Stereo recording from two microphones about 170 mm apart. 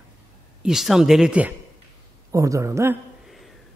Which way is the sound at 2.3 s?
20° right (ahead or behind).